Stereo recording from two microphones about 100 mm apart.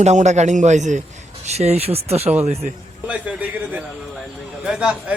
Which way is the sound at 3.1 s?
15° right (ahead or behind).